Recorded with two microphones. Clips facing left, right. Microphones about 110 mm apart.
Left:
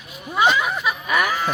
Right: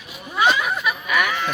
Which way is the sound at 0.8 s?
30° left (ahead or behind).